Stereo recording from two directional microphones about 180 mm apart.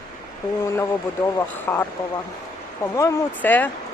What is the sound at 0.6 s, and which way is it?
Speech, 15° left (ahead or behind).